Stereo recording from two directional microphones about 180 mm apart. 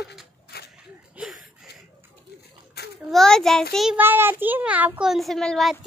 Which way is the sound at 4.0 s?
10° right (ahead or behind).